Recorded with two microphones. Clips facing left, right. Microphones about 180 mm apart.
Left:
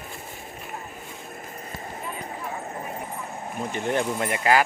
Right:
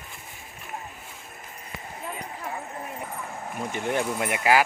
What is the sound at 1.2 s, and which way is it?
Vehicle, 45° left (ahead or behind).